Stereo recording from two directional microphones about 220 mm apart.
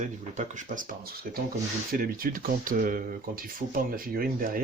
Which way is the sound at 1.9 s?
40° right (ahead or behind).